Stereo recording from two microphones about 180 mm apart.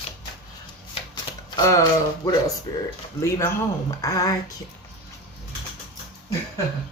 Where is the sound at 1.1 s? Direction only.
20° left (ahead or behind).